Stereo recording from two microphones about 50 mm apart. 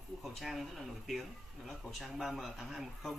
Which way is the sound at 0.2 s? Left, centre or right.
Centre.